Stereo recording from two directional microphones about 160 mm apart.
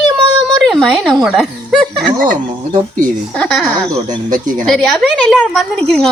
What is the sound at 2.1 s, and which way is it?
Speech, 55° right (ahead or behind).